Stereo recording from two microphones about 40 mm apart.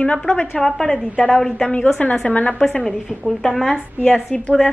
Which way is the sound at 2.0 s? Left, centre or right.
Left.